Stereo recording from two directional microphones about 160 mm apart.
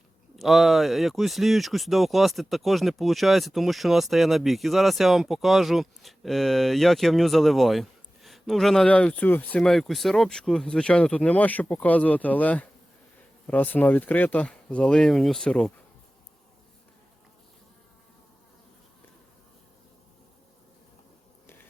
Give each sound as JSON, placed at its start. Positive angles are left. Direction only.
{"t": 0.3, "sound": "speech", "side_deg": 0}